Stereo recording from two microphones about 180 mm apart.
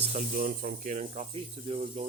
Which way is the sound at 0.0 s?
40° right (ahead or behind).